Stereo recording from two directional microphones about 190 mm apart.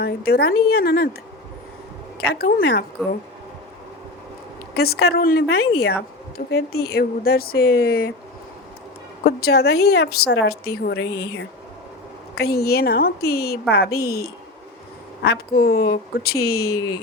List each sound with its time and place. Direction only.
0.0 s a woman's voice: 55° left (ahead or behind)
2.2 s a woman's voice: 55° left (ahead or behind)
4.7 s a woman's voice: 55° left (ahead or behind)
9.2 s a woman's voice: 55° left (ahead or behind)